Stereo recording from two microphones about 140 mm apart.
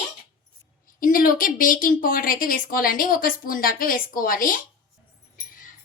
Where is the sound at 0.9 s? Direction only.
85° left.